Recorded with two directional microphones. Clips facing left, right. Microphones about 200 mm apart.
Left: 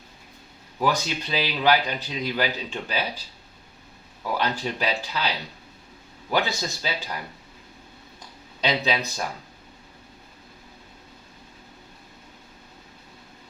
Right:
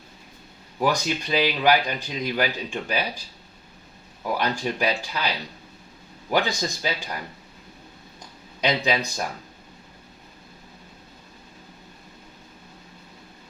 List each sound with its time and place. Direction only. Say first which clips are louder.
0.8 s speech: right 1 dB; 15° right (ahead or behind)
4.2 s speech: right 1 dB; 15° right (ahead or behind)
6.3 s speech: right 2 dB; 15° right (ahead or behind)
8.6 s speech: right 1 dB; 15° right (ahead or behind)